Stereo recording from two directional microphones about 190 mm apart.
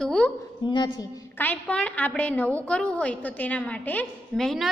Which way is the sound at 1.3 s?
10° left (ahead or behind).